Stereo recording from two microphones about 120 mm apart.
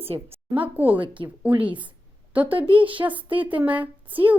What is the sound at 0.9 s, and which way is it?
Speech, 45° right (ahead or behind).